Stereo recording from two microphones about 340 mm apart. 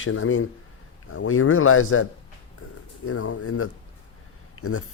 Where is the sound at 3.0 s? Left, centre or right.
Left.